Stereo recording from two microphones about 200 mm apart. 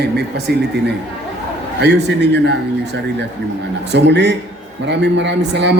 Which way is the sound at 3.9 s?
60° right (ahead or behind).